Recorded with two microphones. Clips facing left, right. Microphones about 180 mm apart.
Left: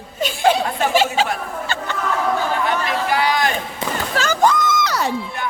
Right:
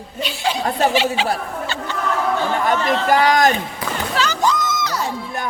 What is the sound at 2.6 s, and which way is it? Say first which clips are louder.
Speech: right 3 dB; 45° right (ahead or behind).